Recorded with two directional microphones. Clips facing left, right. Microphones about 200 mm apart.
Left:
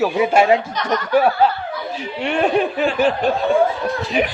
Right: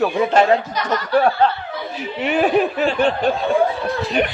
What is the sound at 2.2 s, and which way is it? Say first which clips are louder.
Speech: right 1 dB; 5° right (ahead or behind).